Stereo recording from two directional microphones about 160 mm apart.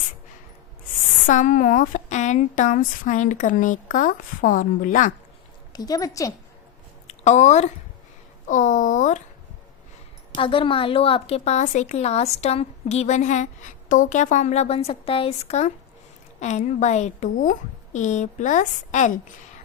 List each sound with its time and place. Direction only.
1.3 s a woman's voice: 55° left (ahead or behind)
5.7 s a woman's voice: 25° left (ahead or behind)
7.1 s a woman's voice: 45° left (ahead or behind)
10.3 s a woman's voice: 35° left (ahead or behind); by 19.2 s 50° left (ahead or behind)